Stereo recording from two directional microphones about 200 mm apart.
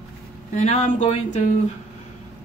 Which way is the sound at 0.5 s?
35° left (ahead or behind).